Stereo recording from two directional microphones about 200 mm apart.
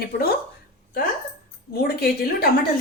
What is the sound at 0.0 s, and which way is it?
Speech, 50° left (ahead or behind).